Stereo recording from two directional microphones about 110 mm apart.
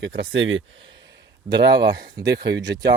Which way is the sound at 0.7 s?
50° right (ahead or behind).